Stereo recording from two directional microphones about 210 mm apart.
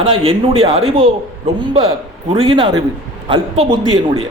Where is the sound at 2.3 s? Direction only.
25° right (ahead or behind).